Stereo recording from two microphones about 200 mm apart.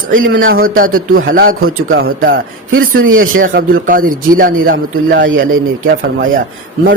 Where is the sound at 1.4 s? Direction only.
85° right.